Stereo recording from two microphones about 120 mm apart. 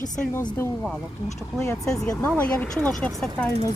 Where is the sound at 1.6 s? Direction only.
25° left (ahead or behind).